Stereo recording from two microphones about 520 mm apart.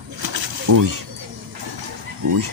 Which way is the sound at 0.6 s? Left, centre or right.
Right.